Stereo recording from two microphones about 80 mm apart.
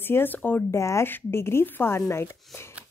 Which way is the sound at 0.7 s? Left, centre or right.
Left.